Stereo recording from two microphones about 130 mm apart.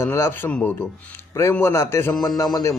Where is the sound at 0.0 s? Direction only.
20° left (ahead or behind).